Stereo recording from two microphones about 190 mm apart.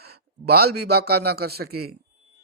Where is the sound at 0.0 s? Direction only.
55° right (ahead or behind).